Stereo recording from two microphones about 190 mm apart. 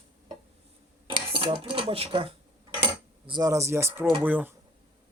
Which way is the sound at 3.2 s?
20° right (ahead or behind).